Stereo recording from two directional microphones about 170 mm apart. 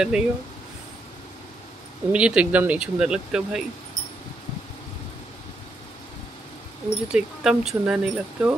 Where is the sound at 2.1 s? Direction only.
5° right (ahead or behind).